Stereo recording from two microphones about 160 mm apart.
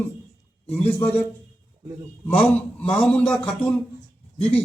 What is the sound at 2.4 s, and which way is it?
A man's voice, 5° left (ahead or behind).